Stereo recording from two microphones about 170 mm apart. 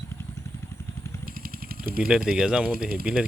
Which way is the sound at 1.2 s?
60° right (ahead or behind).